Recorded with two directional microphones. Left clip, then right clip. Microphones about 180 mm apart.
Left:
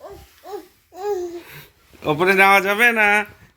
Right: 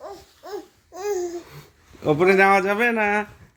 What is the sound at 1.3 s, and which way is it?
Speech, 15° right (ahead or behind).